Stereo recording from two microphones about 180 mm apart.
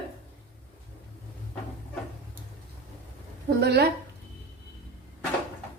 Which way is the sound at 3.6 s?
65° right (ahead or behind).